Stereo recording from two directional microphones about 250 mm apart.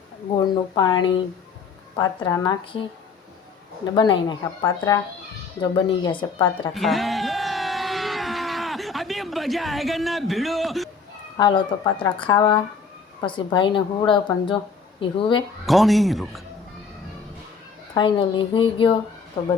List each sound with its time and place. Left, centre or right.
0.3 s speech: centre
3.9 s a woman's voice: centre
6.7 s a sound: centre
11.3 s a woman's voice: centre
15.6 s a man's voice: centre
17.9 s a woman's voice: centre